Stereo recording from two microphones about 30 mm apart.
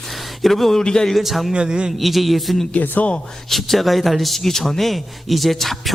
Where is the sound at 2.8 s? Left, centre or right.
Left.